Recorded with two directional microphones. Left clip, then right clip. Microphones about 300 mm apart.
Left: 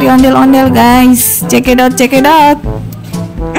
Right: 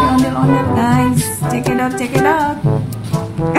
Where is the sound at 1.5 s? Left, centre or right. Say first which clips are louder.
Left 10 dB; left.